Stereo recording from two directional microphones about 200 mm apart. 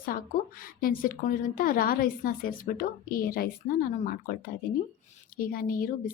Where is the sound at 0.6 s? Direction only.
45° left (ahead or behind).